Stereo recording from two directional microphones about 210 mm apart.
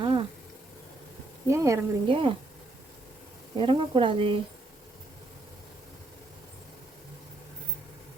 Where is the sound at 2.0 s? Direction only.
25° right (ahead or behind).